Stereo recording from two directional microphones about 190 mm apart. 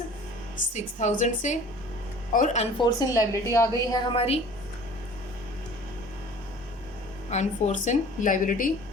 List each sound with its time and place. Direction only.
0.7 s a woman's voice: 40° left (ahead or behind)
2.7 s a woman's voice: 20° left (ahead or behind)
4.1 s a woman's voice: 30° left (ahead or behind)
7.3 s a woman's voice: 40° left (ahead or behind)